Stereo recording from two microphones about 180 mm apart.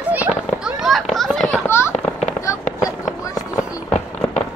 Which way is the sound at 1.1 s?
Centre (ahead or behind).